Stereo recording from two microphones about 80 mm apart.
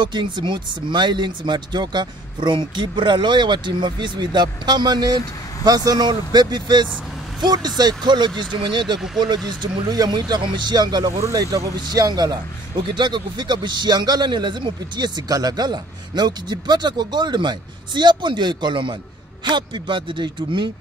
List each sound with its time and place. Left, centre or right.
0.0 s speech: right
7.4 s speech: right
9.5 s speech: right
11.1 s a man's voice: right